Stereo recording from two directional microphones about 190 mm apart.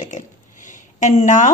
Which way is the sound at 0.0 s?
40° left (ahead or behind).